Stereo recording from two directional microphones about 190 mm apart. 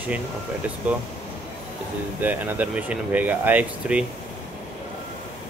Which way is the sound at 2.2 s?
10° right (ahead or behind).